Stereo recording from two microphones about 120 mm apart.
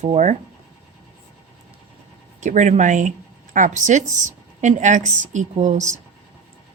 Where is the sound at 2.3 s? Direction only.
85° right.